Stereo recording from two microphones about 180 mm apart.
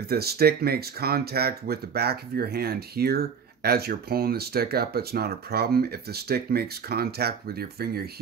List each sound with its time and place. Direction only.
0.1 s speech: 60° right (ahead or behind)